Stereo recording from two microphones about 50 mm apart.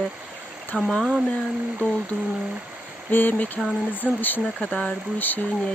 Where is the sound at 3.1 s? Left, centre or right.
Left.